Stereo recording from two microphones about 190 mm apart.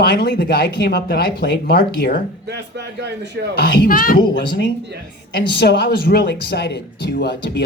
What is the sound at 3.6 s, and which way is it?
Speech, 50° left (ahead or behind).